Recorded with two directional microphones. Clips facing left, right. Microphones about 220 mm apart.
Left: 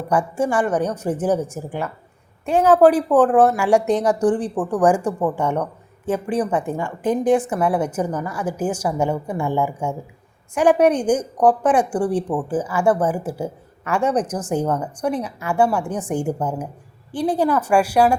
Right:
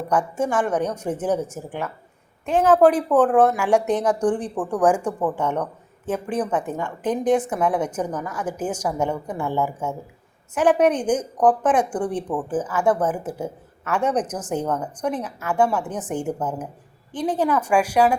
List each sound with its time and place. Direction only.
0.1 s a woman's voice: 10° left (ahead or behind)